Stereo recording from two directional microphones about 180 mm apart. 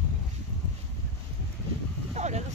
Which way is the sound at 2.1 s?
40° right (ahead or behind).